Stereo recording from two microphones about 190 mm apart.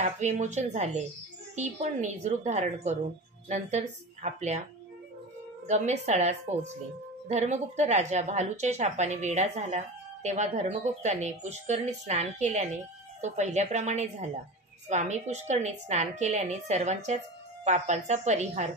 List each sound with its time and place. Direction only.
0.0 s a woman's voice: 40° right (ahead or behind)
5.7 s a woman's voice: 35° right (ahead or behind)